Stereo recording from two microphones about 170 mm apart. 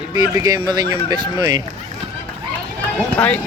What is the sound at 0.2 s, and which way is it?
Speech, 25° right (ahead or behind).